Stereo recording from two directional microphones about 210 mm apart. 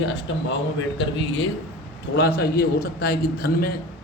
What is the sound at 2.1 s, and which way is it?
A man's voice, 50° left (ahead or behind).